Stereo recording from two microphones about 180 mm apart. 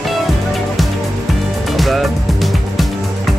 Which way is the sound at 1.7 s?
Centre (ahead or behind).